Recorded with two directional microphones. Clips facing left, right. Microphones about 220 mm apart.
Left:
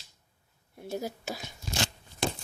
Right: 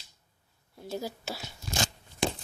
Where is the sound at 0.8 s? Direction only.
20° left (ahead or behind).